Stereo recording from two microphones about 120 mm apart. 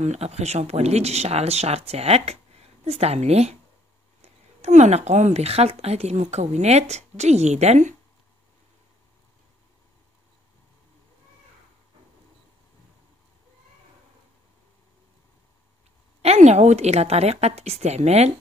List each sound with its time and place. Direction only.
0.0 s a woman's voice: 65° right (ahead or behind)
16.2 s speech: 65° right (ahead or behind)